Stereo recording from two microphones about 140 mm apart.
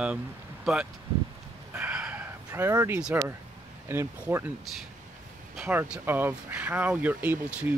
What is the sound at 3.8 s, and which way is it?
Speech, 15° right (ahead or behind).